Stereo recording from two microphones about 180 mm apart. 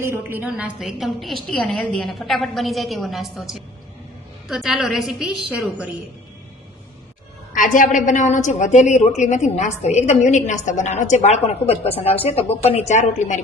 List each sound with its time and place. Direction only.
0.0 s a woman's voice: 10° right (ahead or behind)
7.5 s a woman's voice: 45° left (ahead or behind)